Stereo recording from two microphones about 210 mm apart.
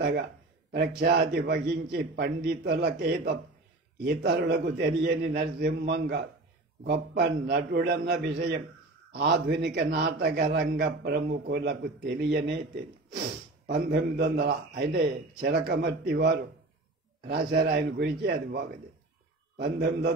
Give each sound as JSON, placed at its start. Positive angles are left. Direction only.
{"t": 0.7, "sound": "a man's voice", "side_deg": -50}
{"t": 13.7, "sound": "a man's voice", "side_deg": -55}
{"t": 17.5, "sound": "a man's voice", "side_deg": -45}